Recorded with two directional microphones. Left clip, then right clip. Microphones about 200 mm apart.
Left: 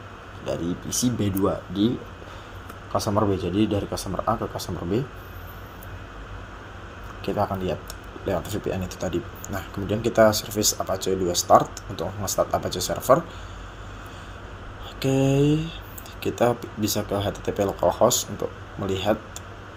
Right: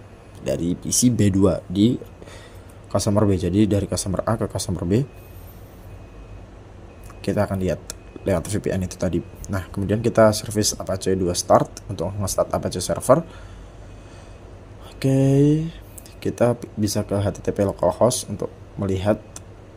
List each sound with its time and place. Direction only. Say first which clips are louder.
0.4 s speech: right 4 dB; 65° right (ahead or behind)
2.9 s speech: right 2 dB; 60° right (ahead or behind)
7.3 s speech: right 2 dB; 60° right (ahead or behind)
15.0 s speech: right 3 dB; 55° right (ahead or behind)